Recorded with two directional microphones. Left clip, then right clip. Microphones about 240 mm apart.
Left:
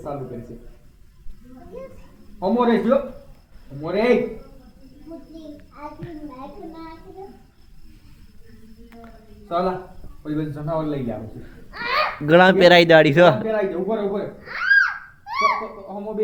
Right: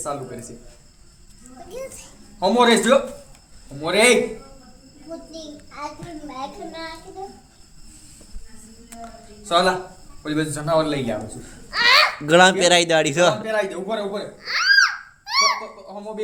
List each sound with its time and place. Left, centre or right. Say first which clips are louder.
2.4 s a man's voice: right 3 dB; right
9.5 s a man's voice: right 5 dB; right
11.7 s a child's voice: right 10 dB; right
12.0 s speech: even; centre
13.5 s a man's voice: left 1 dB; right
15.2 s a sound: right 1 dB; right